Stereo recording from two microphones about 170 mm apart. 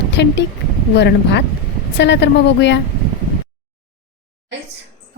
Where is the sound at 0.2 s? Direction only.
90° left.